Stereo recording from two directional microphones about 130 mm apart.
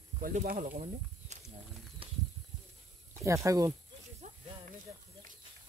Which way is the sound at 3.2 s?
25° right (ahead or behind).